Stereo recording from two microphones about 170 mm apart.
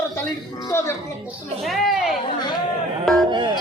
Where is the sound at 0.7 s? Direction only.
15° left (ahead or behind).